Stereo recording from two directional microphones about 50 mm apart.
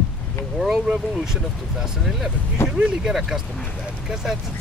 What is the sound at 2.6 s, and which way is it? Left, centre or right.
Speech, left.